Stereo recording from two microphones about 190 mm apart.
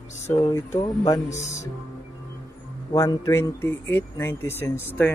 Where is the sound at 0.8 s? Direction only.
20° left (ahead or behind).